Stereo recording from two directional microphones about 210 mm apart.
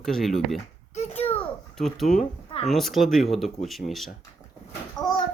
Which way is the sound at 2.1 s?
30° left (ahead or behind).